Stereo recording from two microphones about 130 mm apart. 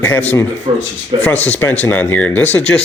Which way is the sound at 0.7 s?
45° right (ahead or behind).